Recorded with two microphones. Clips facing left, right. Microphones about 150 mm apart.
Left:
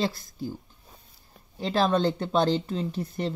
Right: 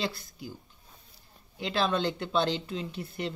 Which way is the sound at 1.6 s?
40° left (ahead or behind).